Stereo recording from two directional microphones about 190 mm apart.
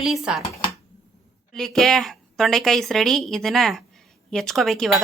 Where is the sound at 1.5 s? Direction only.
Centre (ahead or behind).